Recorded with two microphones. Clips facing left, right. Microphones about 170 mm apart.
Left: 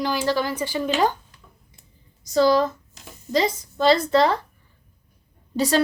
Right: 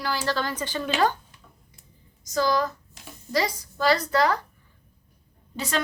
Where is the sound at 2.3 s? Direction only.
30° left (ahead or behind).